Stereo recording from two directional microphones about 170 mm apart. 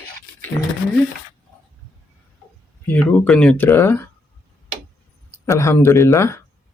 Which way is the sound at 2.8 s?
10° left (ahead or behind).